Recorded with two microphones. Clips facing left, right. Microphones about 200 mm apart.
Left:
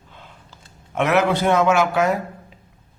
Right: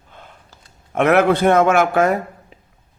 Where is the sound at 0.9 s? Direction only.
55° right (ahead or behind).